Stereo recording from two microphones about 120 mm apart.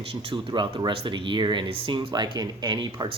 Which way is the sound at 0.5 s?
40° right (ahead or behind).